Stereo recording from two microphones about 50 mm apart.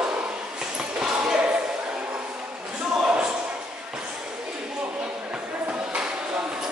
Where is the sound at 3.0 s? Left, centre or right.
Centre.